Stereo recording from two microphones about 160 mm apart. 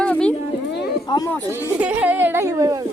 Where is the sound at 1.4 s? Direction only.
15° right (ahead or behind).